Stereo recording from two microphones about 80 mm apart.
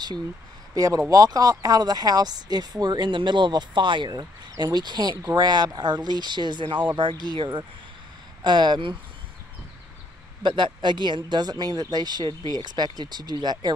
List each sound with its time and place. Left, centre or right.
0.7 s speech: right
10.4 s speech: right